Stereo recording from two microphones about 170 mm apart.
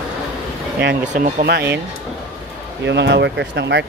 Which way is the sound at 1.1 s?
45° right (ahead or behind).